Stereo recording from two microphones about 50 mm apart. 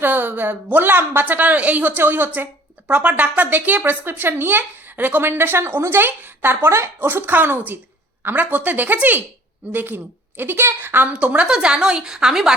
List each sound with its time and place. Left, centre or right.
0.0 s a woman's voice: right
1.9 s a woman's voice: right
6.7 s speech: right
7.2 s a woman's voice: right
11.2 s a woman's voice: right
11.4 s a woman's voice: centre